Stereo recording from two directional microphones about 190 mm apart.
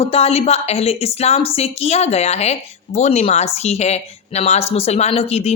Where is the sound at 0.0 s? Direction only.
30° left (ahead or behind).